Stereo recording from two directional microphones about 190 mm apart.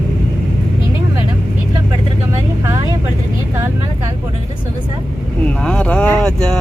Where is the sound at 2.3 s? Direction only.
15° right (ahead or behind).